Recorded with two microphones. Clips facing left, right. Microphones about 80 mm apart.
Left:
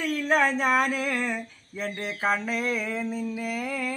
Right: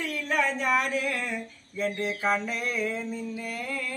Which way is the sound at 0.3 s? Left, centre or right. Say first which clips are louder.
Left 3 dB; left.